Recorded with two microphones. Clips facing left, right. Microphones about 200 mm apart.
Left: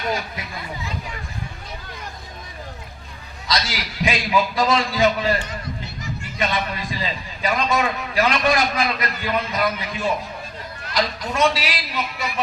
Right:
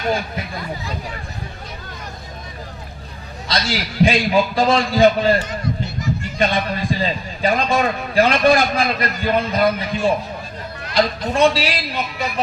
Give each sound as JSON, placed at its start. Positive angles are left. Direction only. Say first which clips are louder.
{"t": 3.5, "sound": "a man's voice", "louder": "right 3 dB", "side_deg": -30}